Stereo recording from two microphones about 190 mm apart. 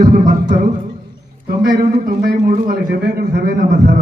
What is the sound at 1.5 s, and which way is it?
A man's voice, 50° right (ahead or behind).